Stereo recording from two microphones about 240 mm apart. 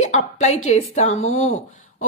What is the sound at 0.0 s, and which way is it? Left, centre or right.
A woman's voice, left.